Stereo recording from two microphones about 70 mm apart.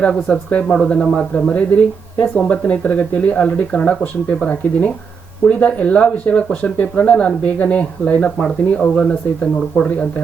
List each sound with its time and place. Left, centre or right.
0.0 s speech: centre
1.5 s speech: centre